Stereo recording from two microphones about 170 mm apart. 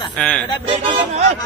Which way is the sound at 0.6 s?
35° right (ahead or behind).